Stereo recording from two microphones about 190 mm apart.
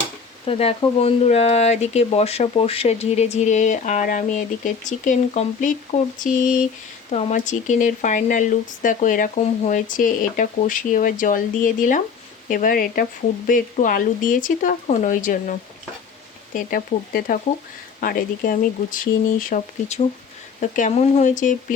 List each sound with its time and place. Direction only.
0.4 s speech: 30° left (ahead or behind)
16.6 s speech: 50° left (ahead or behind)